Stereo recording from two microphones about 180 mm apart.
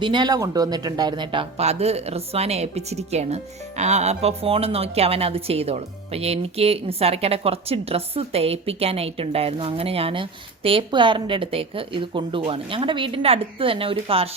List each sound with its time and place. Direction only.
0.0 s speech: 25° right (ahead or behind)